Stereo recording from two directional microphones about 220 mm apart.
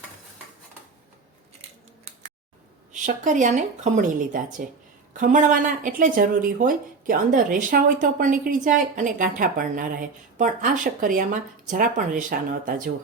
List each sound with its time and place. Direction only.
2.9 s a woman's voice: 35° right (ahead or behind)